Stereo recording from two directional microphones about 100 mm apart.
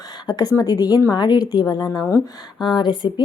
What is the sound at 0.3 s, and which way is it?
A woman's voice, 40° left (ahead or behind).